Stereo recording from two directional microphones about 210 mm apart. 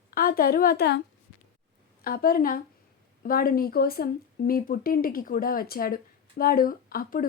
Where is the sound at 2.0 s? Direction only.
45° left (ahead or behind).